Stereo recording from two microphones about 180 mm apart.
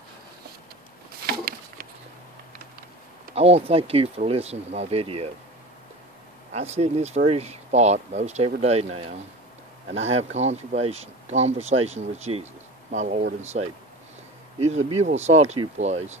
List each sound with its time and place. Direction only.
3.3 s speech: 35° right (ahead or behind)
6.5 s speech: 35° right (ahead or behind)